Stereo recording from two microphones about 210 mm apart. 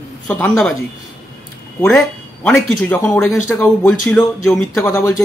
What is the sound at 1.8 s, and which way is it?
Speech, 5° left (ahead or behind).